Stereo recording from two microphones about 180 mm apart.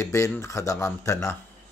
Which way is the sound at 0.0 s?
15° left (ahead or behind).